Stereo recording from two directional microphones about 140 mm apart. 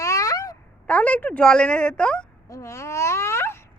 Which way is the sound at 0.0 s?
25° left (ahead or behind).